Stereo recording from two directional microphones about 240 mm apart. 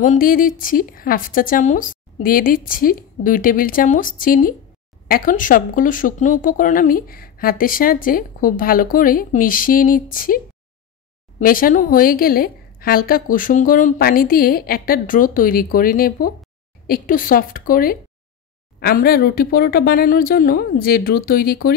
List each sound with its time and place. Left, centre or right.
0.0 s speech: left